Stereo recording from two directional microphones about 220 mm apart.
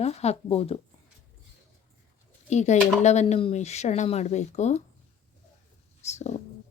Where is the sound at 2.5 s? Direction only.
30° left (ahead or behind).